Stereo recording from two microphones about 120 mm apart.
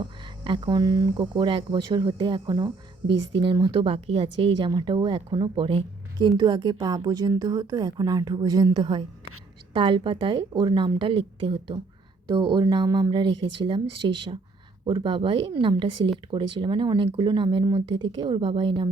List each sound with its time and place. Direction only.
0.0 s a woman's voice: 45° right (ahead or behind)